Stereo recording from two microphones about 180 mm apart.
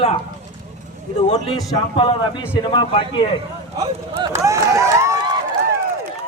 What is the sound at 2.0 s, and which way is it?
Speech, 25° left (ahead or behind).